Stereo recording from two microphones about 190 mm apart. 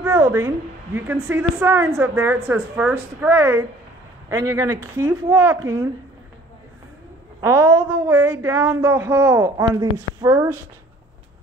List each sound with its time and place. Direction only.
0.0 s a sound: 10° right (ahead or behind)
0.9 s speech: 10° right (ahead or behind)
7.4 s speech: 15° right (ahead or behind)